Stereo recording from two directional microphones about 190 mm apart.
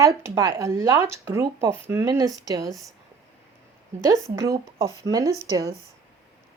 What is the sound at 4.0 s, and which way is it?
Speech, 15° right (ahead or behind).